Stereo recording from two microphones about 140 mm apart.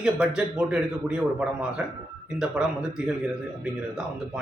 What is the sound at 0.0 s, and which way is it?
A man's voice, 5° right (ahead or behind).